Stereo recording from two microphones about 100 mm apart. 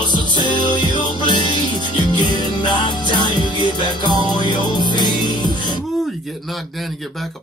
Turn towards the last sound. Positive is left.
turn(degrees=0)  # may be behind; listen again after turning